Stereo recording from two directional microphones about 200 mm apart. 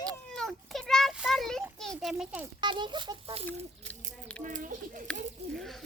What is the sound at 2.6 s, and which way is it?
Speech, 25° right (ahead or behind).